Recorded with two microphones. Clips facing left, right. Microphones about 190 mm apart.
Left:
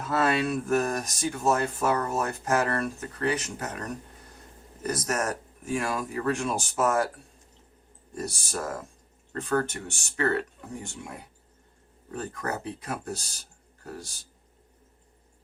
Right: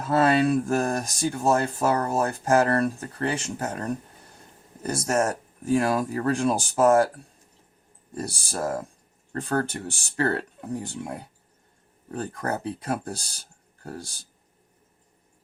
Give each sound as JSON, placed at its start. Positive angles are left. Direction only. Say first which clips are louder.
{"t": 0.0, "sound": "speech", "louder": "right 5 dB", "side_deg": -30}
{"t": 8.1, "sound": "speech", "louder": "right 1 dB", "side_deg": -35}